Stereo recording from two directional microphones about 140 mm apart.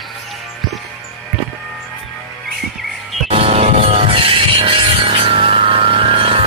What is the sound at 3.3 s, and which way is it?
Music, 45° right (ahead or behind).